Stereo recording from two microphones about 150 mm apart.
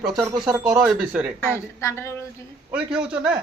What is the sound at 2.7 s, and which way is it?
Speech, 5° right (ahead or behind).